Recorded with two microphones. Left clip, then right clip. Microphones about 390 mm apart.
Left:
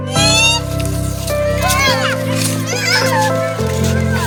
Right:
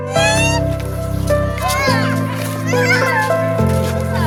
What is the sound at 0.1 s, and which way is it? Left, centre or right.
Music, centre.